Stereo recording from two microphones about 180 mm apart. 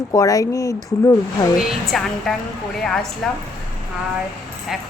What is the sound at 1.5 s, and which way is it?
A woman's voice, centre (ahead or behind).